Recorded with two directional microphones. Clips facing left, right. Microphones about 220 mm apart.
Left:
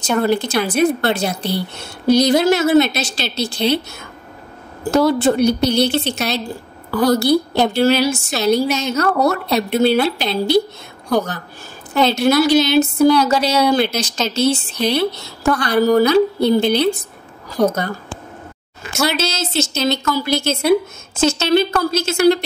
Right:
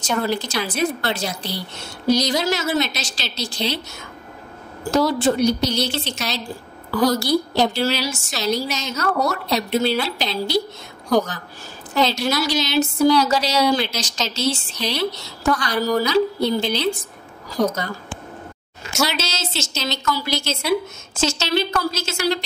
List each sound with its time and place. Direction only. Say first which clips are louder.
0.0 s a woman's voice: left 6 dB; 55° left (ahead or behind)
4.9 s a woman's voice: left 4 dB; 60° left (ahead or behind)
11.9 s a woman's voice: left 6 dB; 55° left (ahead or behind)
19.0 s a woman's voice: left 6 dB; 55° left (ahead or behind)